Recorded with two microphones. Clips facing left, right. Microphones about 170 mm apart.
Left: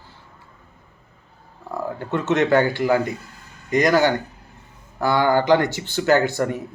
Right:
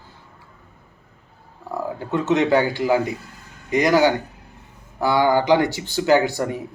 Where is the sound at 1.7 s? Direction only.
15° right (ahead or behind).